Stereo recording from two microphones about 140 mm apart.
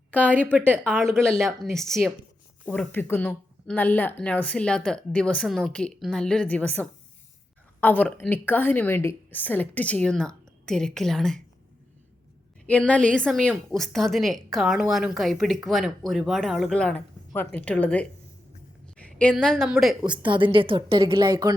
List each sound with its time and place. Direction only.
0.1 s a woman's voice: 10° left (ahead or behind)
0.5 s speech: 15° right (ahead or behind)
1.1 s a woman's voice: 5° left (ahead or behind)
2.6 s a woman's voice: 10° left (ahead or behind)
12.6 s a woman's voice: 10° left (ahead or behind)
20.2 s a woman's voice: 35° right (ahead or behind)